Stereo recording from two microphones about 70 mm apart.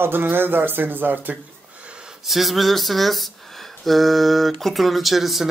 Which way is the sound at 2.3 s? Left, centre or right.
Centre.